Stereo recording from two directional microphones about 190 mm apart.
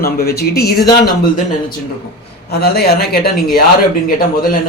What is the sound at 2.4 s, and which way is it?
Speech, 55° left (ahead or behind).